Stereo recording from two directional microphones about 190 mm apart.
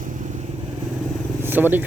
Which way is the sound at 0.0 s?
40° right (ahead or behind).